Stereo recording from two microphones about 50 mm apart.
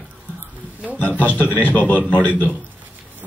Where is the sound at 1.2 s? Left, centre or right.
Left.